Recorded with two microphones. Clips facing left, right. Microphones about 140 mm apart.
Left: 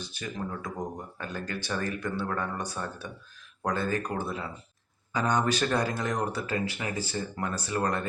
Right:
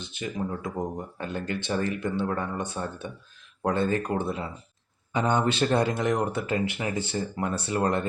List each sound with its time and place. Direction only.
0.0 s speech: 20° right (ahead or behind)